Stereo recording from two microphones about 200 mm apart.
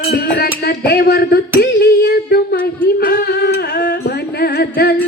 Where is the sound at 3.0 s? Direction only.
50° left (ahead or behind).